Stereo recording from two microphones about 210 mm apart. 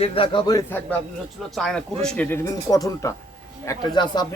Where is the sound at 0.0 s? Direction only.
25° left (ahead or behind).